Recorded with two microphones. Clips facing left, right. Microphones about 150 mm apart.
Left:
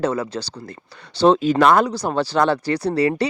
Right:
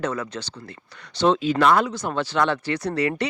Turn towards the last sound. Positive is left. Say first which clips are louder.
# left 5 dB
turn(degrees=35)  # may be behind; listen again after turning